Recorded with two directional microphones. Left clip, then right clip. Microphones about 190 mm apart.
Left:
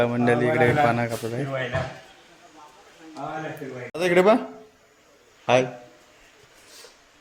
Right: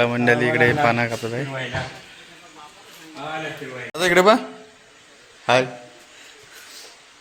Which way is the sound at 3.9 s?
5° right (ahead or behind).